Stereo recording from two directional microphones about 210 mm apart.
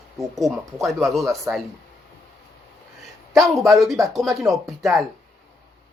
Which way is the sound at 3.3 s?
Centre (ahead or behind).